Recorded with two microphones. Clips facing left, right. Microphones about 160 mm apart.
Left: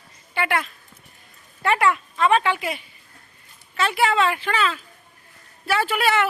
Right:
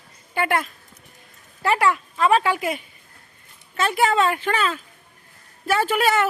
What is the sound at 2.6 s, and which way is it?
Speech, 45° right (ahead or behind).